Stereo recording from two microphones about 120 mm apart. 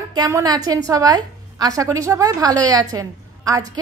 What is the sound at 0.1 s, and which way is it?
A woman's voice, 30° right (ahead or behind).